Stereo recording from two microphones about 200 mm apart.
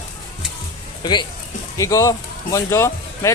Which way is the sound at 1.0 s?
20° left (ahead or behind).